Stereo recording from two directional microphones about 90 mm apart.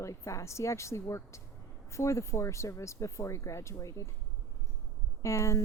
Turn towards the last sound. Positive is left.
turn(degrees=35)  # may be behind; listen again after turning